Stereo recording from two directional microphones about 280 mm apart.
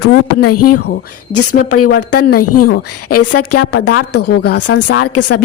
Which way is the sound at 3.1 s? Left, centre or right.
Left.